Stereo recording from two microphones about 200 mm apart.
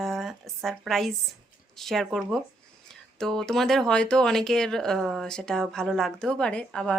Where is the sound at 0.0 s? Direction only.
Centre (ahead or behind).